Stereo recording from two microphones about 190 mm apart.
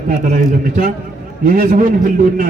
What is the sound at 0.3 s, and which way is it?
A man's voice, 45° right (ahead or behind).